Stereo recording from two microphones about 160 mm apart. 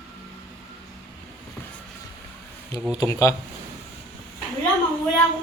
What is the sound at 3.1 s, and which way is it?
Speech, 20° left (ahead or behind).